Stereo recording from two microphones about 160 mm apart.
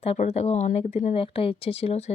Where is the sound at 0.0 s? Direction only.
40° left (ahead or behind).